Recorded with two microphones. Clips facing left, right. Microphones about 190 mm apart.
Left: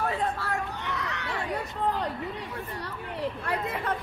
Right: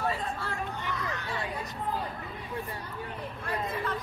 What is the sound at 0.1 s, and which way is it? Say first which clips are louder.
Chatter: left 5 dB; 65° left (ahead or behind).